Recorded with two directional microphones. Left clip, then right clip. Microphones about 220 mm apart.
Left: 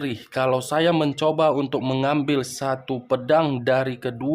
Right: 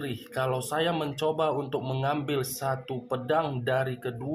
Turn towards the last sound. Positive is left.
turn(degrees=40)  # may be behind; listen again after turning